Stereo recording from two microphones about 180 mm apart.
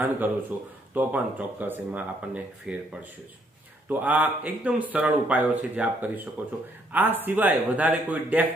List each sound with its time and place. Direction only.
0.2 s speech: 10° right (ahead or behind)